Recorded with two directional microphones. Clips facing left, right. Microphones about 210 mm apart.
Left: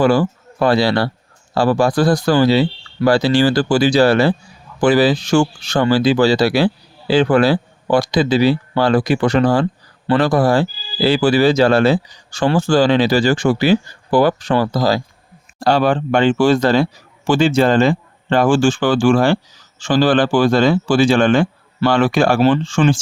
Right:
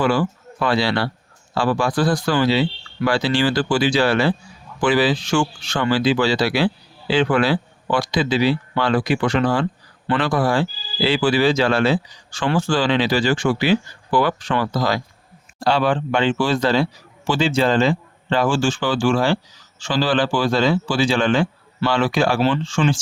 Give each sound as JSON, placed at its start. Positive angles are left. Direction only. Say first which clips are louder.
{"t": 0.0, "sound": "speech", "louder": "left 5 dB", "side_deg": 40}